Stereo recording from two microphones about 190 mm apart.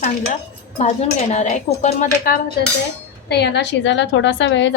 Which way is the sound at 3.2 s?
60° left (ahead or behind).